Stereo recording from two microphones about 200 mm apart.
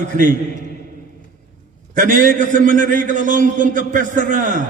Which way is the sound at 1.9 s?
40° right (ahead or behind).